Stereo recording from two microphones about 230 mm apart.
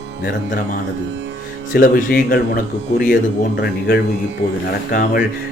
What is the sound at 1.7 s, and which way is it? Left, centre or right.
Speech, left.